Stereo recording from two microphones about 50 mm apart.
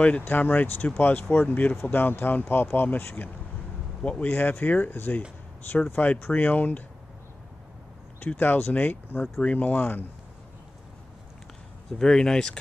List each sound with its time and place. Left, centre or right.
0.2 s speech: left
4.0 s speech: left
4.3 s speech: left
6.0 s speech: left
8.3 s speech: left
12.0 s speech: centre